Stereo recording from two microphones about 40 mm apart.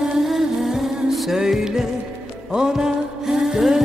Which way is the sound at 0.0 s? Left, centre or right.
Centre.